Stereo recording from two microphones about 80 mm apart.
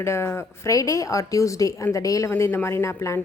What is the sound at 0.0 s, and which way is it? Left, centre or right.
Speech, left.